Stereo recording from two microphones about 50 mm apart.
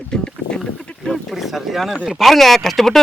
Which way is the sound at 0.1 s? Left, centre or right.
Centre.